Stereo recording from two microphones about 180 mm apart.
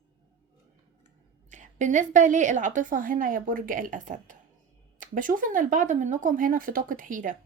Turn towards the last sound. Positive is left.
turn(degrees=-50)  # may be behind; listen again after turning